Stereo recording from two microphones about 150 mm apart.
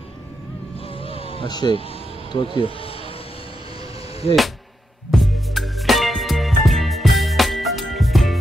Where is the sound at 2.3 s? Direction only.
35° left (ahead or behind).